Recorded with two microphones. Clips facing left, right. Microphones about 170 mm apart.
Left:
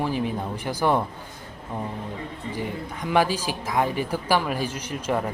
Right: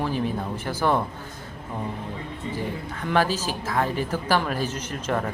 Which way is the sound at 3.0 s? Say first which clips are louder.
Left 1 dB; 15° left (ahead or behind).